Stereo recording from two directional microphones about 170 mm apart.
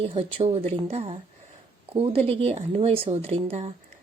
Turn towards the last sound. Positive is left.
turn(degrees=-40)  # may be behind; listen again after turning